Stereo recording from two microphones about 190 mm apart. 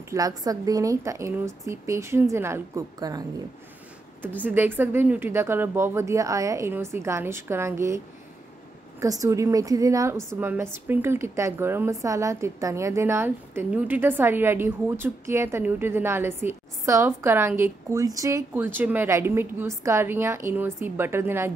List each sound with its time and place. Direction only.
0.1 s a woman's voice: 20° right (ahead or behind)
4.4 s a woman's voice: 10° right (ahead or behind)
9.0 s a woman's voice: 20° right (ahead or behind)